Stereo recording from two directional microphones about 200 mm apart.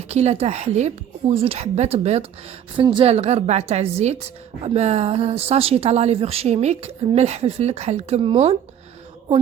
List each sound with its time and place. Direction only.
0.1 s speech: 30° right (ahead or behind)